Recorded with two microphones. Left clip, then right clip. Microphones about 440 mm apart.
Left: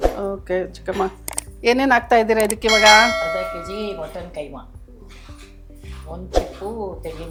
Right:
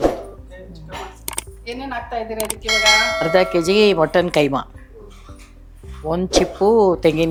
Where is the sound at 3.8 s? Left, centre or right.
Right.